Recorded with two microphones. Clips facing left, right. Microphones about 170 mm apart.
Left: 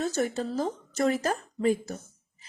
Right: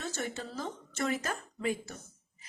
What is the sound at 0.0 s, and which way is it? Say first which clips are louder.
Speech: left 9 dB; 40° left (ahead or behind).